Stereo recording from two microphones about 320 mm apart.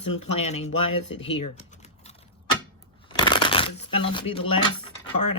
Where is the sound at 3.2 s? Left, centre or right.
Centre.